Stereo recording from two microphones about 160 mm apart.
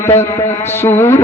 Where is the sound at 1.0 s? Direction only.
15° left (ahead or behind).